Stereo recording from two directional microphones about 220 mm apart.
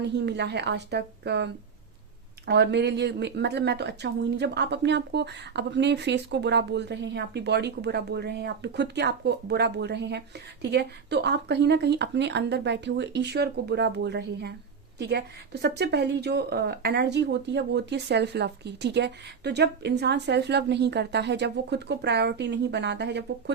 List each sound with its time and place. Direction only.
0.0 s a woman's voice: 50° right (ahead or behind)
2.5 s a woman's voice: 50° right (ahead or behind)